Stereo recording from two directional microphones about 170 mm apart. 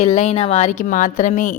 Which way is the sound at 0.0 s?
40° left (ahead or behind).